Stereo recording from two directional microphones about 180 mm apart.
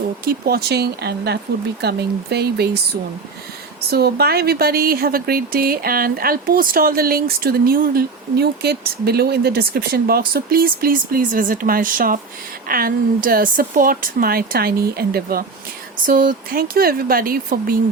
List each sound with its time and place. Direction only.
0.3 s speech: 60° right (ahead or behind)
3.9 s speech: 60° right (ahead or behind)